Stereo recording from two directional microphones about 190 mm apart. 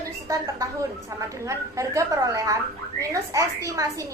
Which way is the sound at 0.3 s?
15° right (ahead or behind).